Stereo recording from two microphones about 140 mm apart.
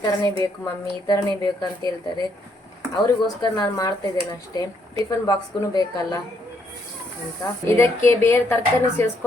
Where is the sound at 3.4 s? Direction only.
25° left (ahead or behind).